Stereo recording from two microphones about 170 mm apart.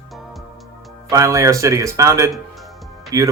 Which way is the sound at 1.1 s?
20° right (ahead or behind).